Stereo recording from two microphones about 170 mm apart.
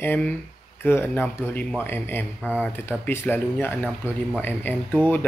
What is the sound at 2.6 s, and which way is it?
Speech, 10° left (ahead or behind).